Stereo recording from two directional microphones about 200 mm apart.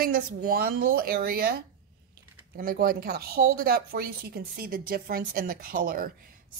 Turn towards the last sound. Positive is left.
turn(degrees=-45)  # may be behind; listen again after turning